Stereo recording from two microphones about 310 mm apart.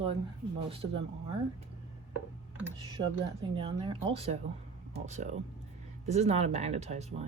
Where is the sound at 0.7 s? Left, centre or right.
Centre.